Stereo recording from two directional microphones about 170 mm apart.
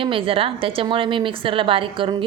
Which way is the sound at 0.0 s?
30° right (ahead or behind).